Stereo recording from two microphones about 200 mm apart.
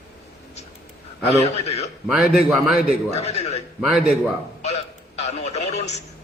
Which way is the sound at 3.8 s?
Centre (ahead or behind).